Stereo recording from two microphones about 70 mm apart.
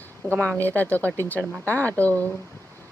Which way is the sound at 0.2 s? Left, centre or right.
Centre.